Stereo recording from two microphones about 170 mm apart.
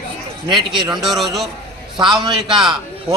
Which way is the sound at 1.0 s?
Centre (ahead or behind).